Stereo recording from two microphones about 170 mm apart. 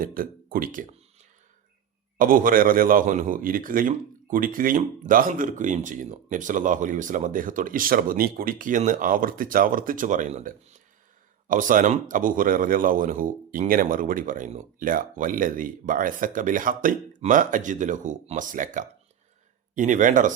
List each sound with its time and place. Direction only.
0.0 s speech: 55° right (ahead or behind)
2.1 s a man's voice: 55° right (ahead or behind)